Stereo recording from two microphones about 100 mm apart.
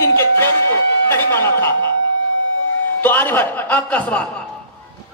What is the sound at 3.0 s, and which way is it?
A man's voice, 20° left (ahead or behind).